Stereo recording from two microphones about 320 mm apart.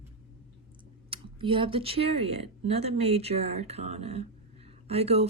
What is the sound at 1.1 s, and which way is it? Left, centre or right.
Speech, centre.